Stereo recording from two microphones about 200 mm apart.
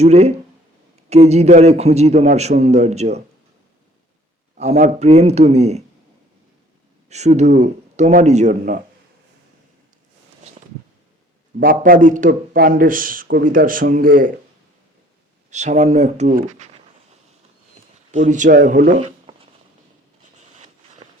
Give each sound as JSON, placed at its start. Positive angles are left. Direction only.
{"t": 0.0, "sound": "a man's voice", "side_deg": -35}
{"t": 4.5, "sound": "a man's voice", "side_deg": -35}
{"t": 7.1, "sound": "a man's voice", "side_deg": -35}
{"t": 11.6, "sound": "speech", "side_deg": -45}
{"t": 15.4, "sound": "a man's voice", "side_deg": -35}
{"t": 18.3, "sound": "speech", "side_deg": -40}